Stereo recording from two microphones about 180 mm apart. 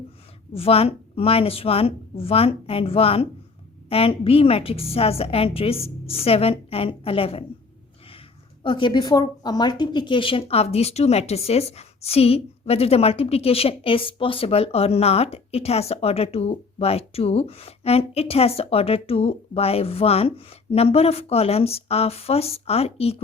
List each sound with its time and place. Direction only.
0.5 s a woman's voice: 35° left (ahead or behind)
8.6 s a woman's voice: 25° left (ahead or behind)